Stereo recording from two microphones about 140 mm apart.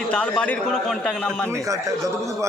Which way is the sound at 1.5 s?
20° right (ahead or behind).